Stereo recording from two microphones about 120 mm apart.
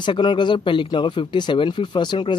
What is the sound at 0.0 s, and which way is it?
Speech, 40° left (ahead or behind).